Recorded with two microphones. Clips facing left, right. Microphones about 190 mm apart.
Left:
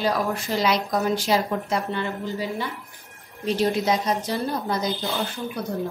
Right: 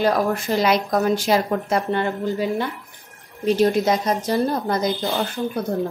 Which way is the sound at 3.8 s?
50° right (ahead or behind).